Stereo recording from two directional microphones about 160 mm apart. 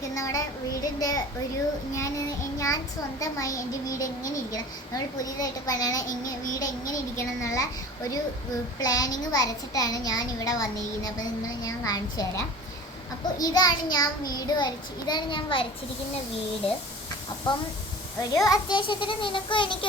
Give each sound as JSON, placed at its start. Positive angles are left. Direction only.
{"t": 0.1, "sound": "a child's voice", "side_deg": 20}
{"t": 8.8, "sound": "a child's voice", "side_deg": 20}
{"t": 17.5, "sound": "a child's voice", "side_deg": 30}